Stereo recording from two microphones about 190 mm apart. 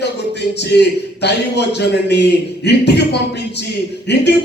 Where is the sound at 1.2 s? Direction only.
60° left (ahead or behind).